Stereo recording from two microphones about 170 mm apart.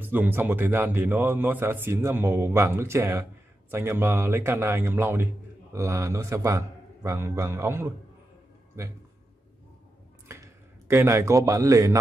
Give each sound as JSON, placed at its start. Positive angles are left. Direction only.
{"t": 0.0, "sound": "a man's voice", "side_deg": -10}
{"t": 10.2, "sound": "a man's voice", "side_deg": -15}